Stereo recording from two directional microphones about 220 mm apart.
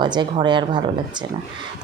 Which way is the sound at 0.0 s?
20° right (ahead or behind).